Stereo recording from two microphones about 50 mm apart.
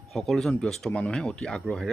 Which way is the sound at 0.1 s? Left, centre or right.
Centre.